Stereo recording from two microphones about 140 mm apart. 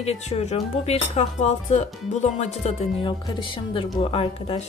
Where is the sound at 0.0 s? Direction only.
50° left (ahead or behind).